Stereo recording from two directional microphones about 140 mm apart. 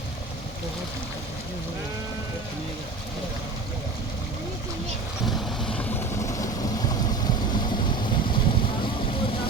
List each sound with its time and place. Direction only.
5.2 s vehicle: 5° left (ahead or behind); by 9.5 s 40° left (ahead or behind)